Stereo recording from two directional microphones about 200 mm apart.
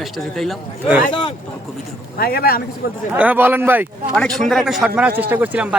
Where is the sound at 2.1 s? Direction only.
50° left (ahead or behind).